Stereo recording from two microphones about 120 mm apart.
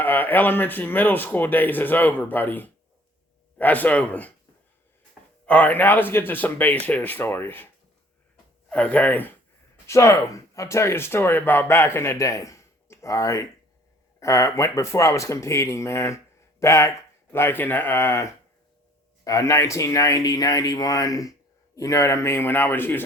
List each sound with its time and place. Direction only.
0.0 s speech: 15° left (ahead or behind)
5.5 s speech: 15° left (ahead or behind)
8.7 s speech: 10° left (ahead or behind)